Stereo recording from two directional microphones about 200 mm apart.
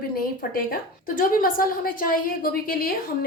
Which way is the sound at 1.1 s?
45° left (ahead or behind).